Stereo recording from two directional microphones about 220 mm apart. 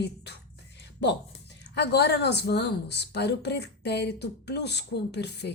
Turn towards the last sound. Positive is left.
turn(degrees=50)  # may be behind; listen again after turning